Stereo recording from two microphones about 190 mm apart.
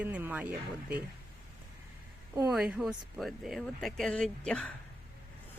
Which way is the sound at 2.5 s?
Centre (ahead or behind).